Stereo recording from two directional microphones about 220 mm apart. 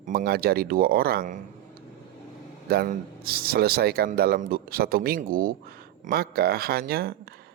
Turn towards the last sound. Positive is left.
turn(degrees=-45)  # may be behind; listen again after turning